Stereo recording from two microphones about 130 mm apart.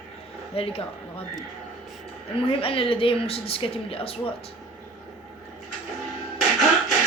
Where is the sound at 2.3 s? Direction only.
45° left (ahead or behind).